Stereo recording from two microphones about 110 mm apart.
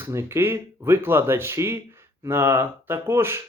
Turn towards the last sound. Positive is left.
turn(degrees=-20)  # may be behind; listen again after turning